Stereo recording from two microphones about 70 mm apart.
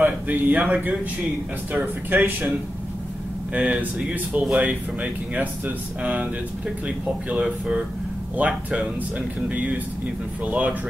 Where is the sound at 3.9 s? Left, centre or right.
Centre.